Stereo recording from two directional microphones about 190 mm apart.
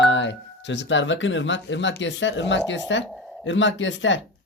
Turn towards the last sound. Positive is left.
turn(degrees=75)  # may be behind; listen again after turning